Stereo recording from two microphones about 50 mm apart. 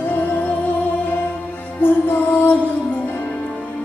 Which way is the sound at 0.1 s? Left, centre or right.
Left.